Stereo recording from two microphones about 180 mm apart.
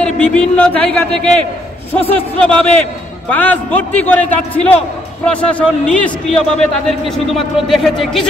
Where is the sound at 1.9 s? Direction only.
35° left (ahead or behind).